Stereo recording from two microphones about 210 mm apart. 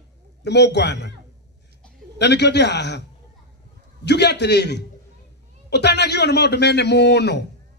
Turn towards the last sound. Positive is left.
turn(degrees=55)  # may be behind; listen again after turning